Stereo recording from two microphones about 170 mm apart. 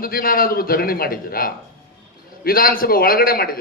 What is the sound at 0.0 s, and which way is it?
A man's voice, 60° left (ahead or behind).